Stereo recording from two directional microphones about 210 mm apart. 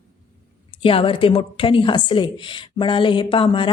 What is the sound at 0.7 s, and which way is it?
A woman's voice, 25° left (ahead or behind).